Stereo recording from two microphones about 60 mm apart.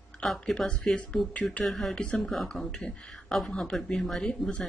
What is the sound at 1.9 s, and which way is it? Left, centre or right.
Speech, centre.